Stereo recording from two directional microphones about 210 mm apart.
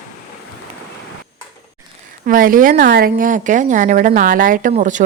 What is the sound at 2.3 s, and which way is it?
A woman's voice, 40° right (ahead or behind).